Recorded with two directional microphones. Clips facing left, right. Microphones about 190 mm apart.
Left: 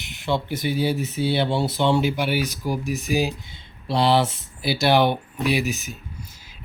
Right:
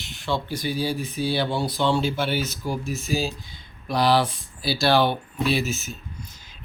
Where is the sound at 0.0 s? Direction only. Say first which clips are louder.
Left 2 dB; 20° left (ahead or behind).